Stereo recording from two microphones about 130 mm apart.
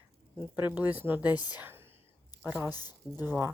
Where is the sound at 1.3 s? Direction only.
30° left (ahead or behind).